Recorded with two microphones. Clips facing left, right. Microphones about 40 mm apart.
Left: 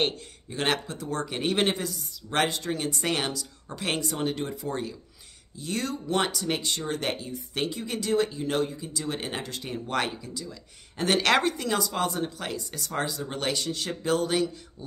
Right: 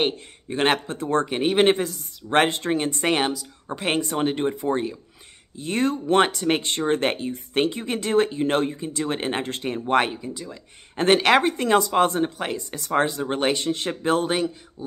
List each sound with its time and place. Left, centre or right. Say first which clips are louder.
0.5 s speech: right 6 dB; right
1.3 s speech: right 5 dB; right
1.7 s speech: right 8 dB; right
11.5 s speech: right 9 dB; right
14.8 s speech: right 8 dB; centre